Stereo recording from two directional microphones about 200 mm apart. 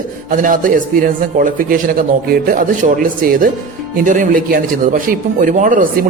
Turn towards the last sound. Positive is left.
turn(degrees=-45)  # may be behind; listen again after turning